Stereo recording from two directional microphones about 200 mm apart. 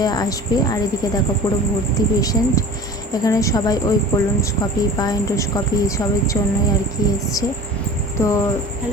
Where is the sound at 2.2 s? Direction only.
15° left (ahead or behind).